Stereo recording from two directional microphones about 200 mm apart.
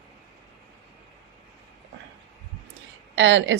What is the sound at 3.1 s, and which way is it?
Speech, 65° right (ahead or behind).